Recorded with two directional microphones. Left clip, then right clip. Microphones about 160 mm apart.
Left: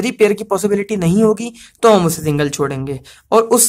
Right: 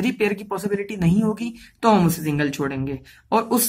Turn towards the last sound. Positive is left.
turn(degrees=40)  # may be behind; listen again after turning